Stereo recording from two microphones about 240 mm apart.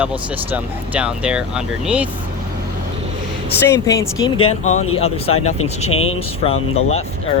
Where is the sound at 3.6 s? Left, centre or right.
Centre.